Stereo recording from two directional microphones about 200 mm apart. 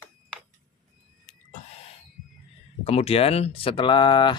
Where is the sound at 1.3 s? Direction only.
35° left (ahead or behind).